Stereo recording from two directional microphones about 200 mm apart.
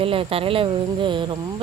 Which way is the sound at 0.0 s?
25° right (ahead or behind).